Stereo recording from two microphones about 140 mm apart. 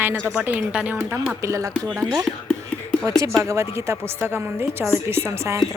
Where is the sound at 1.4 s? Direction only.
20° right (ahead or behind).